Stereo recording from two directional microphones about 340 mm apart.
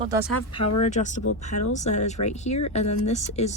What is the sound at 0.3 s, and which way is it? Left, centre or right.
Speech, left.